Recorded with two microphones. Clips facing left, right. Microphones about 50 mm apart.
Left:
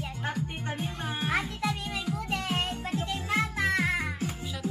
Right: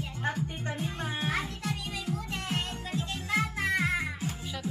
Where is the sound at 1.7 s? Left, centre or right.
Left.